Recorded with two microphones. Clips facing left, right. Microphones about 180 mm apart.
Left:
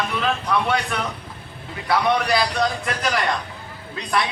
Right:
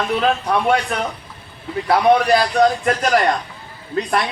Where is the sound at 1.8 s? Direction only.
45° right (ahead or behind).